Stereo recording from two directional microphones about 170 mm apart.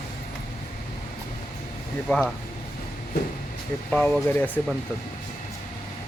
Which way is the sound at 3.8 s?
5° left (ahead or behind).